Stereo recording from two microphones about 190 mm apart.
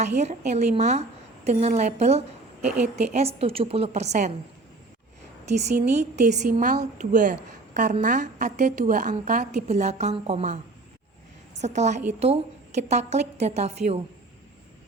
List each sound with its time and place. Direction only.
0.2 s a woman's voice: 35° right (ahead or behind)
5.5 s a woman's voice: 35° right (ahead or behind)